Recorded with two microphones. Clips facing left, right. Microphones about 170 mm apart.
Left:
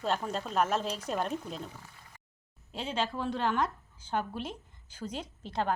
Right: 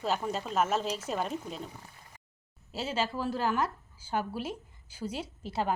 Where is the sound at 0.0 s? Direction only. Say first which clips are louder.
Right 1 dB; 5° right (ahead or behind).